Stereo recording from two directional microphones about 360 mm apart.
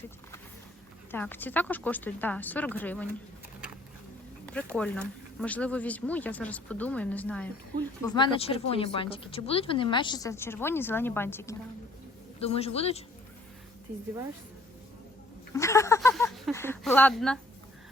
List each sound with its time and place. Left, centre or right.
1.1 s speech: centre
4.4 s speech: centre
12.4 s speech: centre
15.5 s a sound: centre